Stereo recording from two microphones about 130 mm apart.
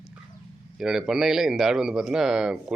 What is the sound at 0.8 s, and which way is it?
A man's voice, 5° right (ahead or behind).